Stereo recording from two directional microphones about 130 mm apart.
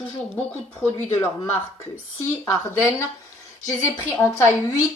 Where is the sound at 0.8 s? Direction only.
15° left (ahead or behind).